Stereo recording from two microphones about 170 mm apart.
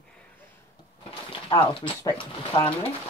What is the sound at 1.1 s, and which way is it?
Speech, 30° left (ahead or behind).